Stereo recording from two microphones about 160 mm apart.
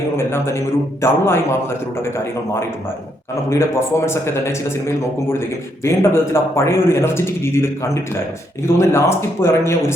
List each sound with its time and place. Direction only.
0.2 s a man's voice: 15° left (ahead or behind)